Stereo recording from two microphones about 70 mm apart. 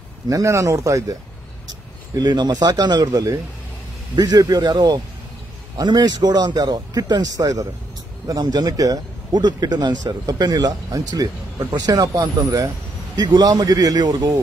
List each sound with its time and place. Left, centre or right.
0.3 s speech: right
2.1 s speech: right
4.1 s speech: right
5.8 s speech: right